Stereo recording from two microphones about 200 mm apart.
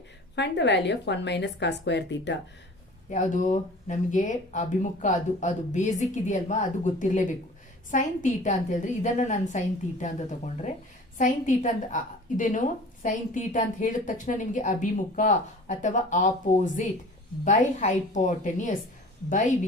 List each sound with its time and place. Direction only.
0.3 s a woman's voice: 60° left (ahead or behind)
3.1 s a woman's voice: 40° left (ahead or behind)
17.4 s a woman's voice: 40° left (ahead or behind)